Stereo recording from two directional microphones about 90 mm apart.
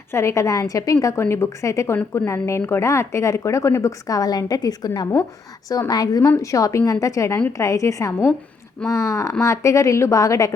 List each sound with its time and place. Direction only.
0.1 s a woman's voice: 30° left (ahead or behind)